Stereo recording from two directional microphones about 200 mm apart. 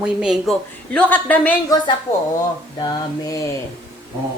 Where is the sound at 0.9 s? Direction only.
10° left (ahead or behind).